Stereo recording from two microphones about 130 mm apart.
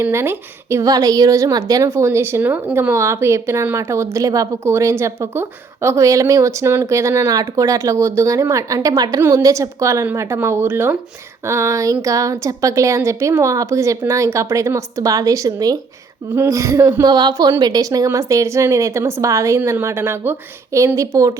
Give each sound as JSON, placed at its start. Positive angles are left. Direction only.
{"t": 0.0, "sound": "a woman's voice", "side_deg": -20}